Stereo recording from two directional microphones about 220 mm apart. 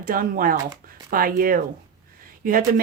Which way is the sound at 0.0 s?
40° right (ahead or behind).